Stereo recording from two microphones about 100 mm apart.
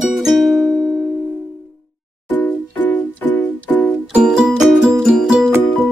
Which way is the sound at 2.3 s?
15° left (ahead or behind).